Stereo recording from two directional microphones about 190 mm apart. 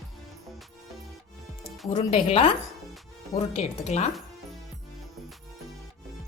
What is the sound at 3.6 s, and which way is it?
Speech, 35° left (ahead or behind).